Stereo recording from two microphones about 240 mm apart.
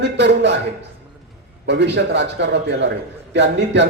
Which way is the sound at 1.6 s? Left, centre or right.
Right.